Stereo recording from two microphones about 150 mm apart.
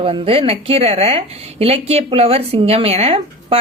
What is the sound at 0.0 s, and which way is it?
A woman's voice, 35° right (ahead or behind).